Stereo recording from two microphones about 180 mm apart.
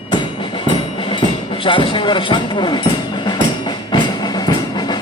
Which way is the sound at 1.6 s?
30° left (ahead or behind).